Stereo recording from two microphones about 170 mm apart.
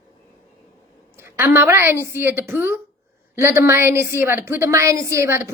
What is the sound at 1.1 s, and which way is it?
A woman's voice, 15° right (ahead or behind).